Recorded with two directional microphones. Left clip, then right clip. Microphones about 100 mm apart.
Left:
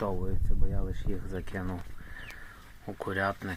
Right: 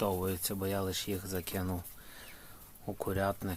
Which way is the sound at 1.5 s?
35° right (ahead or behind).